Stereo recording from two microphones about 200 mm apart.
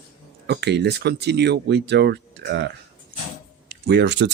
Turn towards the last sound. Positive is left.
turn(degrees=-60)  # may be behind; listen again after turning